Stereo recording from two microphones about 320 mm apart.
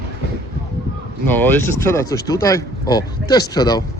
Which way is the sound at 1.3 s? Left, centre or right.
Centre.